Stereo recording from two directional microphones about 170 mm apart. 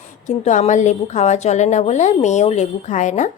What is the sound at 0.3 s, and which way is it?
A woman's voice, 45° left (ahead or behind).